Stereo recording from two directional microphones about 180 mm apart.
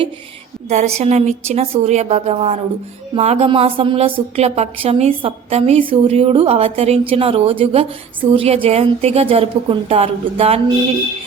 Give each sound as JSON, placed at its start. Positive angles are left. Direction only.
{"t": 0.7, "sound": "a woman's voice", "side_deg": -40}